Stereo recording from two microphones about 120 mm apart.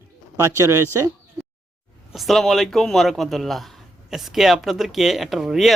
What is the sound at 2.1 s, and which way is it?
A man's voice, centre (ahead or behind).